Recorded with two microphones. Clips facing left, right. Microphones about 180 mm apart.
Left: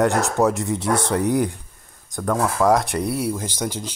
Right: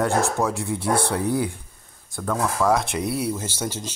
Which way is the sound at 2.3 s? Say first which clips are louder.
Left 3 dB; 15° left (ahead or behind).